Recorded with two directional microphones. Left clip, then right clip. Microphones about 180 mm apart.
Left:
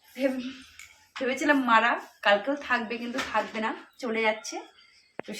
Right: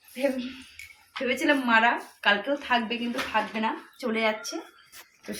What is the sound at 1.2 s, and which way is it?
A woman's voice, 10° left (ahead or behind).